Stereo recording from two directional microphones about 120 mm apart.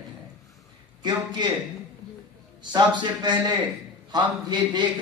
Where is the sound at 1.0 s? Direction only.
40° right (ahead or behind).